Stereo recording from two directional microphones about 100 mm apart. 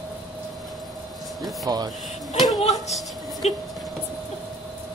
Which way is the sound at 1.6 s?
40° right (ahead or behind).